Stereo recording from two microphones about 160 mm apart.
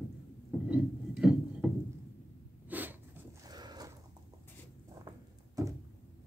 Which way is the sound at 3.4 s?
25° right (ahead or behind).